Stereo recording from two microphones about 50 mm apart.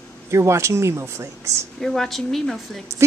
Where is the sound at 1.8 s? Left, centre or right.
Centre.